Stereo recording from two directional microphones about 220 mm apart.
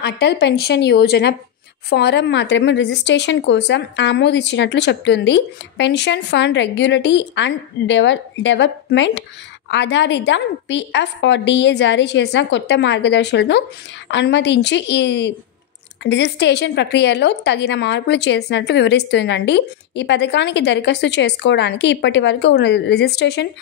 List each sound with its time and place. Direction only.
0.0 s a woman's voice: 50° left (ahead or behind)